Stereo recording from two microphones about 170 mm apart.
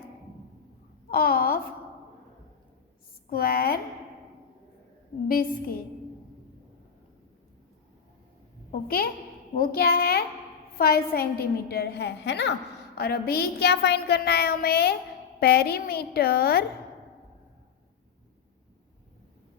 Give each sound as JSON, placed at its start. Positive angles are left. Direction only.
{"t": 1.1, "sound": "a child's voice", "side_deg": 60}
{"t": 3.2, "sound": "a child's voice", "side_deg": 60}
{"t": 5.3, "sound": "a child's voice", "side_deg": 60}
{"t": 9.6, "sound": "a child's voice", "side_deg": 65}
{"t": 13.0, "sound": "speech", "side_deg": 65}